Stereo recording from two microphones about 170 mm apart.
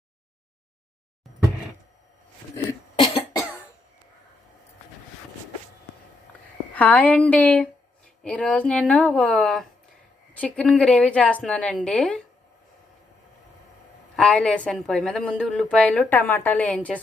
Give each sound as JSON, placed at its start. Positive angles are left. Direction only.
{"t": 2.9, "sound": "cough", "side_deg": 35}
{"t": 6.7, "sound": "a woman's voice", "side_deg": 10}
{"t": 14.2, "sound": "a woman's voice", "side_deg": 5}